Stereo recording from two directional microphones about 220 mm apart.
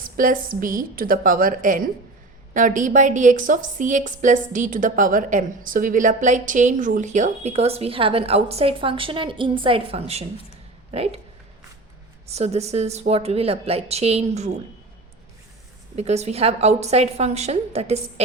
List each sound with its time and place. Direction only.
0.0 s a woman's voice: 40° right (ahead or behind)
12.3 s a woman's voice: 30° right (ahead or behind)
16.0 s a woman's voice: 30° right (ahead or behind)